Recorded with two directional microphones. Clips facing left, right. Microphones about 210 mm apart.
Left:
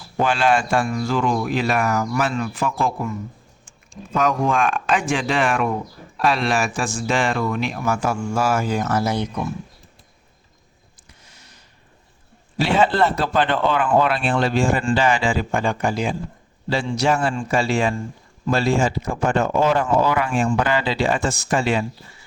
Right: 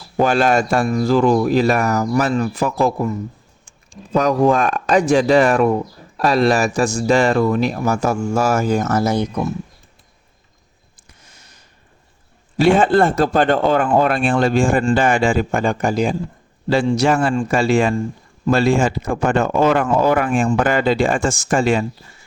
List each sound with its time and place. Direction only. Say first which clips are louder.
0.2 s speech: right 4 dB; 45° right (ahead or behind)
11.3 s a sound: even; 45° right (ahead or behind)
12.5 s speech: right 5 dB; 50° right (ahead or behind)